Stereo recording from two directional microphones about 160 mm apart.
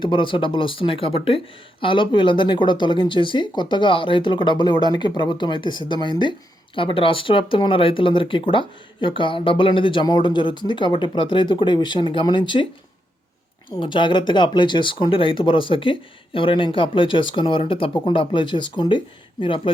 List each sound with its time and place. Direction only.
0.0 s speech: 30° left (ahead or behind)
13.7 s speech: 30° left (ahead or behind)